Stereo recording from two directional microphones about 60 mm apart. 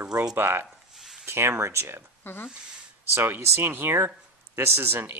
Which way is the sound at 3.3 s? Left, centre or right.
Right.